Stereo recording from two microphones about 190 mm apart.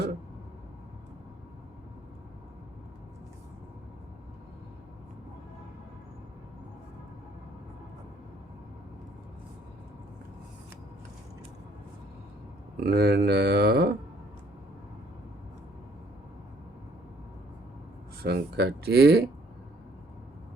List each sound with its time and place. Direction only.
12.8 s speech: 55° right (ahead or behind)
18.2 s speech: 60° right (ahead or behind)